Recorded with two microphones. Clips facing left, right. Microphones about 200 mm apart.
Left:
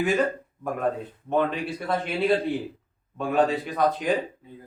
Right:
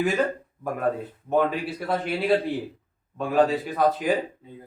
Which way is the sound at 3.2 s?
Centre (ahead or behind).